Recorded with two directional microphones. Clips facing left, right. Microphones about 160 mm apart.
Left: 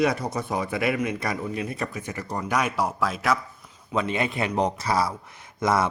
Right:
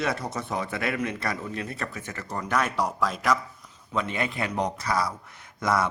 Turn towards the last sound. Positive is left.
turn(degrees=25)  # may be behind; listen again after turning